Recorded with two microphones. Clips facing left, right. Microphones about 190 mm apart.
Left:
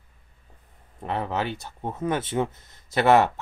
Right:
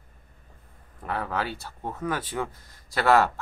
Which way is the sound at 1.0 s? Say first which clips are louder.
Left 2 dB; 20° left (ahead or behind).